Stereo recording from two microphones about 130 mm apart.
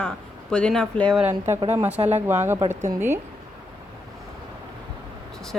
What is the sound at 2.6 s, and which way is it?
Speech, 65° right (ahead or behind).